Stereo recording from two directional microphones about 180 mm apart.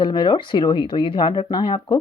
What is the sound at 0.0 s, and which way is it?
Speech, 25° left (ahead or behind).